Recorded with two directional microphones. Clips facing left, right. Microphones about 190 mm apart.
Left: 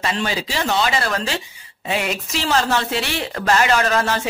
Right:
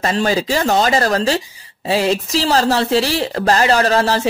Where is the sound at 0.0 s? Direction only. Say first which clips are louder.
Right 6 dB; 40° right (ahead or behind).